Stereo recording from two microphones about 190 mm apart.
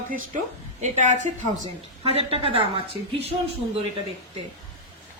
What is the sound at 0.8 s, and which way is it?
A woman's voice, 40° right (ahead or behind).